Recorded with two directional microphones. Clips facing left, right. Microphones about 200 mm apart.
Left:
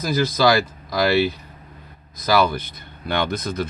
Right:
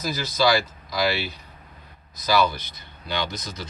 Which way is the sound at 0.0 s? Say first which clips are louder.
Left 4 dB; 55° left (ahead or behind).